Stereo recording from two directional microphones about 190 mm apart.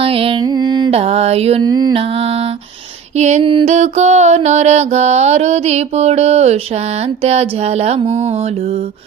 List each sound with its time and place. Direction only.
0.0 s music: 30° right (ahead or behind)
1.6 s mantra: 20° right (ahead or behind)
3.2 s mantra: 35° right (ahead or behind)